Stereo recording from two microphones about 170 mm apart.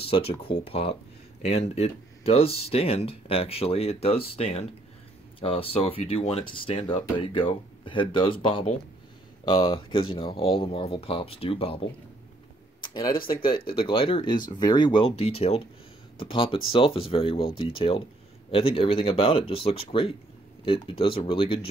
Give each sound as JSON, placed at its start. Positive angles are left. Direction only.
{"t": 0.1, "sound": "speech", "side_deg": 35}
{"t": 12.8, "sound": "speech", "side_deg": 30}